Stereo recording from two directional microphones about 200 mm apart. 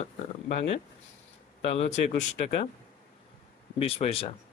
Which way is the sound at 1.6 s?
30° left (ahead or behind).